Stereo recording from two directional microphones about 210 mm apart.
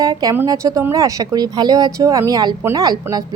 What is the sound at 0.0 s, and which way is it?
A woman's voice, 15° right (ahead or behind).